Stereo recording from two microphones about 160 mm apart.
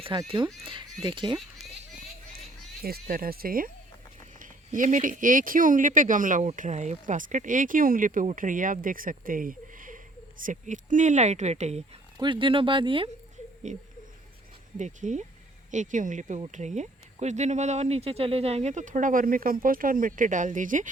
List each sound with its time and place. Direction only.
0.0 s speech: 30° right (ahead or behind)
2.8 s speech: 65° right (ahead or behind); by 11.8 s 45° right (ahead or behind)
12.1 s speech: 30° right (ahead or behind)
13.7 s speech: 50° right (ahead or behind)